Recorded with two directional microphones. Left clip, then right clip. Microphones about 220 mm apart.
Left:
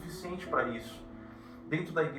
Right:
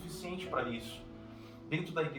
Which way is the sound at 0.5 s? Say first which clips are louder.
Left 5 dB; 25° right (ahead or behind).